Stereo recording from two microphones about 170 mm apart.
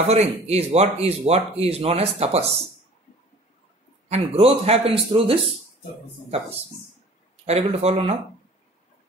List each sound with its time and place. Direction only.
0.1 s speech: 40° right (ahead or behind)
4.1 s speech: 40° right (ahead or behind)
7.4 s speech: 40° right (ahead or behind)